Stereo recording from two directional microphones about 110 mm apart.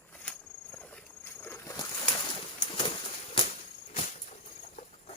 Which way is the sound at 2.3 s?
55° left (ahead or behind).